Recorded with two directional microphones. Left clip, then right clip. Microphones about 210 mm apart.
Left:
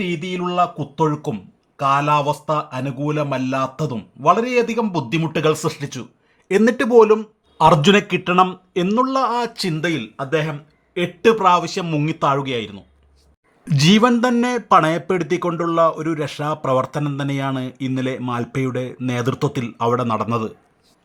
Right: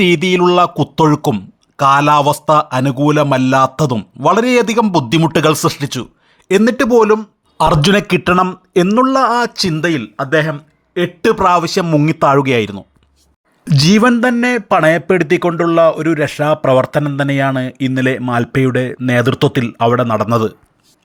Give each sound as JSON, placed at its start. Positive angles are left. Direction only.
{"t": 0.0, "sound": "speech", "side_deg": -45}
{"t": 6.6, "sound": "speech", "side_deg": -15}
{"t": 7.6, "sound": "speech", "side_deg": -30}
{"t": 14.0, "sound": "speech", "side_deg": -10}